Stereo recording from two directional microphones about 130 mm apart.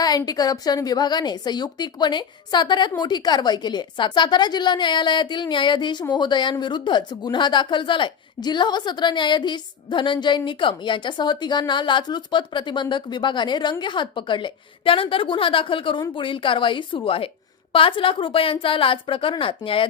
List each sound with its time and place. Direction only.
0.2 s a woman's voice: 30° left (ahead or behind)